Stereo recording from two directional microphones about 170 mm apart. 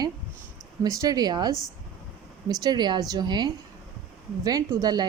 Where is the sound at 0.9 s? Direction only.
20° right (ahead or behind).